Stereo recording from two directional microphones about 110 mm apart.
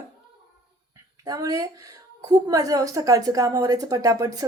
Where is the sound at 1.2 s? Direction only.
35° right (ahead or behind).